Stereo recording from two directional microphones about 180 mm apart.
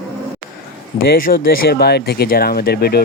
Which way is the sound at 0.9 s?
55° left (ahead or behind).